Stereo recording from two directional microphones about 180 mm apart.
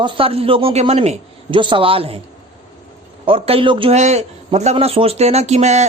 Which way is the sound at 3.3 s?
30° right (ahead or behind).